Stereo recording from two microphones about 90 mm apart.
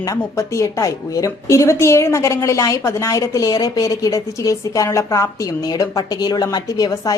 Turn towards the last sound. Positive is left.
turn(degrees=40)  # may be behind; listen again after turning